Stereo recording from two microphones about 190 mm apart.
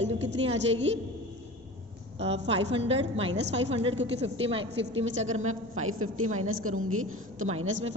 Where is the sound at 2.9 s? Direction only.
30° right (ahead or behind).